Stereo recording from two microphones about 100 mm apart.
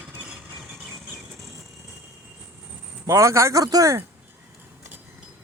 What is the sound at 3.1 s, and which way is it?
Speech, 30° right (ahead or behind).